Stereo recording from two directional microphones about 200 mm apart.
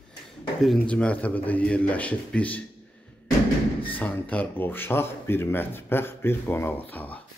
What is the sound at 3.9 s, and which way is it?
Speech, 10° left (ahead or behind).